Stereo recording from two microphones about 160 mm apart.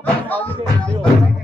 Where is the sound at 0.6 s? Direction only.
Centre (ahead or behind).